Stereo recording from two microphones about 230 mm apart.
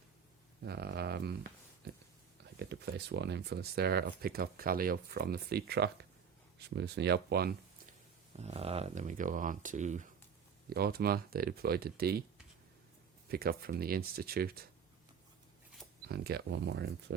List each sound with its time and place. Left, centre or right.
0.6 s a sound: right
2.6 s speech: right
8.4 s speech: right
13.2 s speech: right
16.0 s speech: right